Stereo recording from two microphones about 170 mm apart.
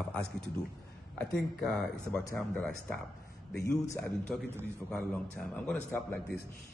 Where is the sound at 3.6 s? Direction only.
20° left (ahead or behind).